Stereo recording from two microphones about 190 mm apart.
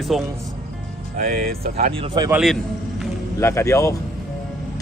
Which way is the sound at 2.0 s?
20° right (ahead or behind).